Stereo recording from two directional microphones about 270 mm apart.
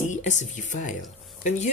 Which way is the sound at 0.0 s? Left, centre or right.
Left.